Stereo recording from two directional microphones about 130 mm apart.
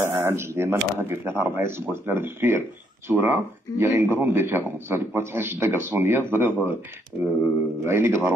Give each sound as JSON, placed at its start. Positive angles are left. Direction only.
{"t": 0.0, "sound": "speech", "side_deg": -20}